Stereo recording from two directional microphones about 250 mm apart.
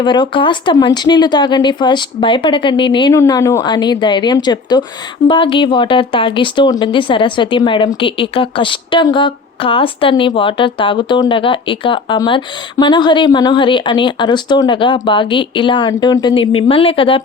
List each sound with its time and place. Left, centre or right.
0.0 s speech: centre